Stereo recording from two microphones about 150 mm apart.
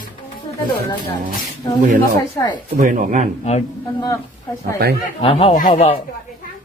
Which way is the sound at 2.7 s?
60° right (ahead or behind).